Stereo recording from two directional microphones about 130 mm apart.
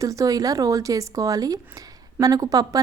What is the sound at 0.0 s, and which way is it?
A woman's voice, 25° right (ahead or behind).